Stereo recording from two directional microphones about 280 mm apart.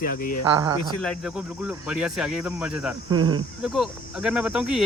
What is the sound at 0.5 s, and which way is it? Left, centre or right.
Speech, centre.